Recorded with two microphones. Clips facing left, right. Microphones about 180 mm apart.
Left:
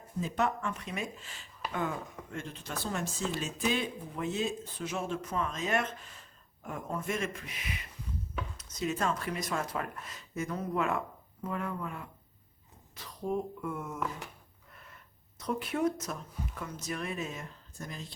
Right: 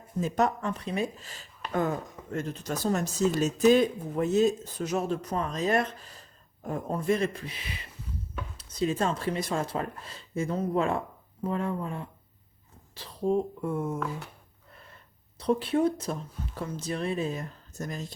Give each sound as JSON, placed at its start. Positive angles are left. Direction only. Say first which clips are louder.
{"t": 0.2, "sound": "speech", "louder": "right 5 dB", "side_deg": -40}
{"t": 15.4, "sound": "speech", "louder": "right 7 dB", "side_deg": -30}